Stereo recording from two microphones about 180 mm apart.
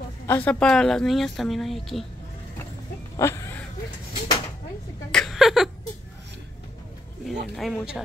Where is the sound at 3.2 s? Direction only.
15° left (ahead or behind).